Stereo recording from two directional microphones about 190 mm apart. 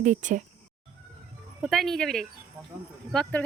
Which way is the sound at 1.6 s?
Centre (ahead or behind).